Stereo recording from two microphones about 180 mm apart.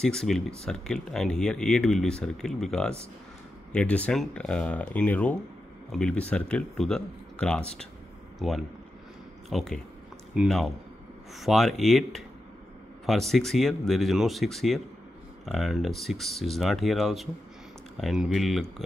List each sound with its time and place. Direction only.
0.0 s speech: 5° left (ahead or behind)